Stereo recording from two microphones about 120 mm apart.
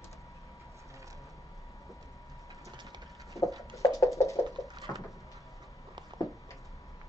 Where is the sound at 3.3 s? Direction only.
Centre (ahead or behind).